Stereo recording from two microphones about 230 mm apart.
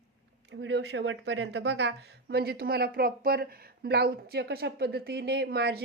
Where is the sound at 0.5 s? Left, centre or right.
Right.